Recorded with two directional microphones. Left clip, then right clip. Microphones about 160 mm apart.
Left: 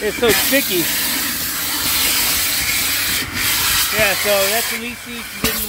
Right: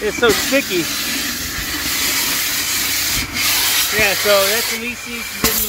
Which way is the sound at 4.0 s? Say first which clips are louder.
Right 3 dB; 10° right (ahead or behind).